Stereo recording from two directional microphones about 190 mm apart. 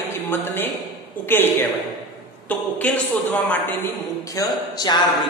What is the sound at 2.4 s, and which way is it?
A woman's voice, 5° left (ahead or behind).